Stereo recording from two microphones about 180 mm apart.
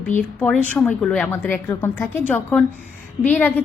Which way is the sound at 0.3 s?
10° left (ahead or behind).